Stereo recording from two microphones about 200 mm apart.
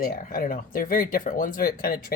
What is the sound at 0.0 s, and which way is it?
Speech, 45° left (ahead or behind).